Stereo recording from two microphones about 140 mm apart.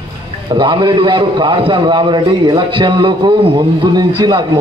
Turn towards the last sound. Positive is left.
turn(degrees=-30)  # may be behind; listen again after turning